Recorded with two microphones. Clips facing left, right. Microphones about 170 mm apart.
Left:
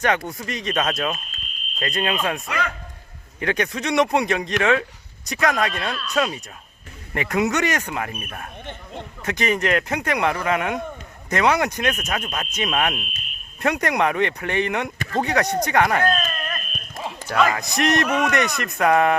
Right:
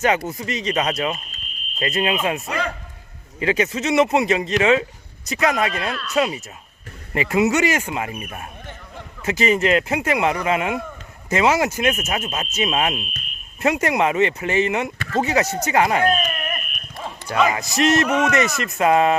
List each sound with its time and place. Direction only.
0.0 s speech: 5° right (ahead or behind)
2.5 s a man's voice: 30° right (ahead or behind)
3.4 s speech: 5° right (ahead or behind)
16.1 s a sound: 10° right (ahead or behind)
17.2 s speech: 15° right (ahead or behind)
17.6 s speech: centre (ahead or behind)